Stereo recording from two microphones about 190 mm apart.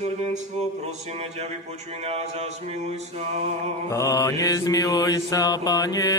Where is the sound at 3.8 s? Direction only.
15° left (ahead or behind).